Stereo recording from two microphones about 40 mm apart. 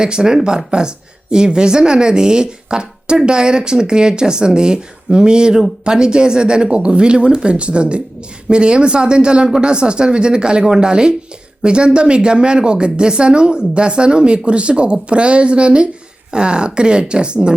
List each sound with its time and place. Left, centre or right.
0.0 s a woman's voice: centre